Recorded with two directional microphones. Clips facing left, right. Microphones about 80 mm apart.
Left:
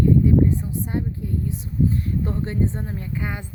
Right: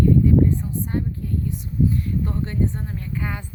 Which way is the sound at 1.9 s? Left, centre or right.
Left.